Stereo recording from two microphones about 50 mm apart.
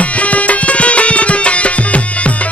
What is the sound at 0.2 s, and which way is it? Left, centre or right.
Music, left.